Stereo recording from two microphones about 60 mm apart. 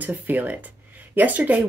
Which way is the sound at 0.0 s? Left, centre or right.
Right.